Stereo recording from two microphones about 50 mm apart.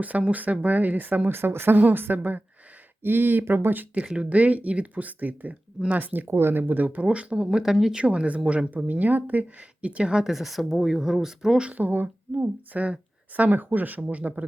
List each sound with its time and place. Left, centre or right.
0.0 s a woman's voice: right
1.4 s a woman's voice: right
4.1 s a woman's voice: right
6.2 s speech: right; by 7.9 s centre
7.9 s speech: right
10.2 s speech: centre
11.6 s a woman's voice: right
12.3 s a woman's voice: right